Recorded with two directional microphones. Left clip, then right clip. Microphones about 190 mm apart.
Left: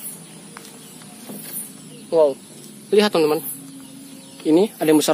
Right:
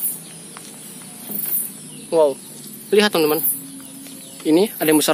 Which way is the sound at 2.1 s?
Centre (ahead or behind).